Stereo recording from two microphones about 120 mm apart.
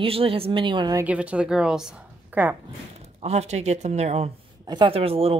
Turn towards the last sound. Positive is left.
turn(degrees=-55)  # may be behind; listen again after turning